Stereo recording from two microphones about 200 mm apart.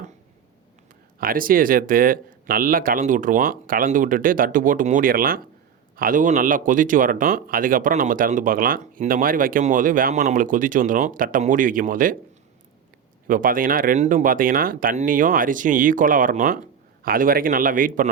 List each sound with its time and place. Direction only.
1.2 s speech: 45° right (ahead or behind)
13.2 s speech: 45° right (ahead or behind)